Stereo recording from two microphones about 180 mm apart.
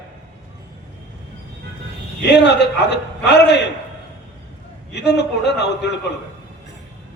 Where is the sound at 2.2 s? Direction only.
70° left (ahead or behind).